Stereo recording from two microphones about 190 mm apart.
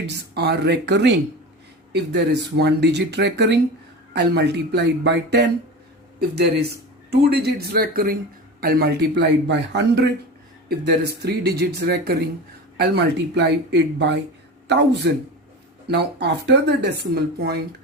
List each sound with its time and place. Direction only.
0.1 s speech: 60° right (ahead or behind)